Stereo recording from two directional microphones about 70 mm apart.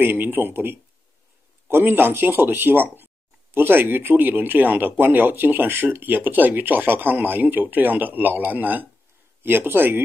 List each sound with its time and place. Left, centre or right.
0.0 s speech: right